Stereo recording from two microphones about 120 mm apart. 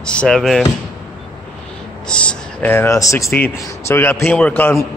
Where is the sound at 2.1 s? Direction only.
10° left (ahead or behind).